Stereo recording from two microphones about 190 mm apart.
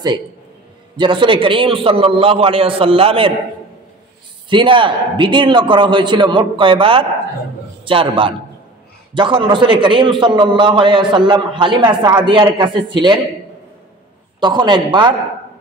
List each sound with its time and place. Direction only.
0.9 s a man's voice: 25° right (ahead or behind)
4.5 s a man's voice: 25° right (ahead or behind)
14.4 s a man's voice: 25° right (ahead or behind)